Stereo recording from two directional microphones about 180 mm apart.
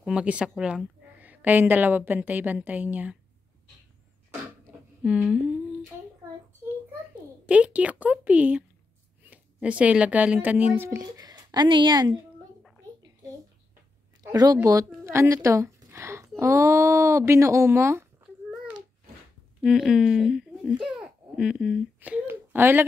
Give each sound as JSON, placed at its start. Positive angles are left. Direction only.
{"t": 0.0, "sound": "speech", "side_deg": -5}
{"t": 5.0, "sound": "speech", "side_deg": -5}
{"t": 7.4, "sound": "speech", "side_deg": -5}
{"t": 14.3, "sound": "speech", "side_deg": -20}
{"t": 19.6, "sound": "a child's voice", "side_deg": 0}